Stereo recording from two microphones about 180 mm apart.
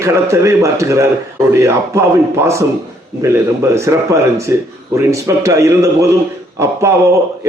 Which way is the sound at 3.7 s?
15° right (ahead or behind).